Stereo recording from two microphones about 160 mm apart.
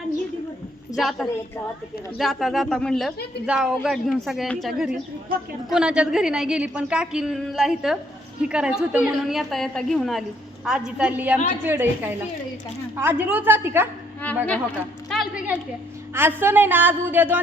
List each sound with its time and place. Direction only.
0.9 s a woman's voice: centre (ahead or behind)
14.2 s speech: 10° left (ahead or behind)
15.1 s a woman's voice: centre (ahead or behind)
16.1 s a woman's voice: 15° right (ahead or behind)